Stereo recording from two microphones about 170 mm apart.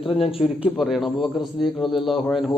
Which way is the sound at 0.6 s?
Centre (ahead or behind).